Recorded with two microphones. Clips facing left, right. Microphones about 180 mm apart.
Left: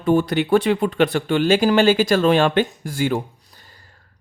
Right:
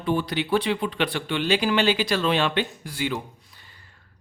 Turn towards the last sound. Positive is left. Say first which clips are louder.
# left 3 dB
turn(degrees=40)  # may be behind; listen again after turning